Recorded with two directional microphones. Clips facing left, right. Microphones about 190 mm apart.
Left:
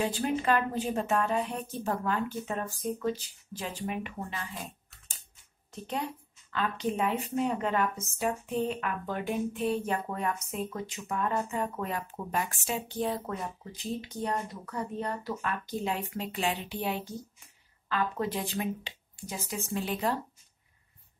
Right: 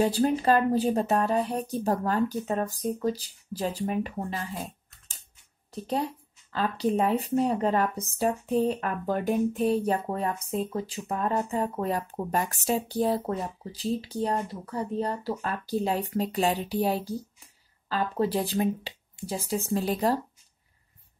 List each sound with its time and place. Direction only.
0.0 s speech: 35° right (ahead or behind)
5.7 s speech: 35° right (ahead or behind)